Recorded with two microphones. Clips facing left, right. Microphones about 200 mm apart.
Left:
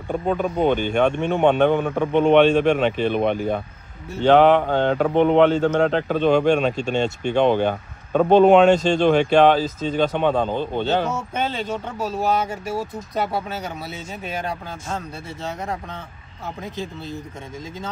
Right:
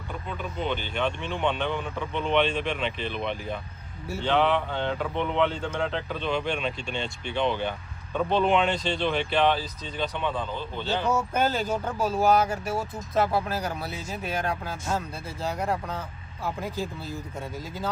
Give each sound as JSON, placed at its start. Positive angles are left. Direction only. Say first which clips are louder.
{"t": 0.1, "sound": "speech", "louder": "left 13 dB", "side_deg": 50}
{"t": 8.4, "sound": "speech", "louder": "left 11 dB", "side_deg": 45}
{"t": 10.1, "sound": "speech", "louder": "left 10 dB", "side_deg": 70}
{"t": 11.3, "sound": "speech", "louder": "even", "side_deg": -5}
{"t": 13.1, "sound": "speech", "louder": "right 1 dB", "side_deg": 0}